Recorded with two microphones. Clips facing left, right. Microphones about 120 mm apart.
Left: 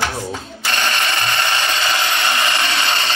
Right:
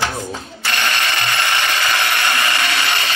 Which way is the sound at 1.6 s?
25° left (ahead or behind).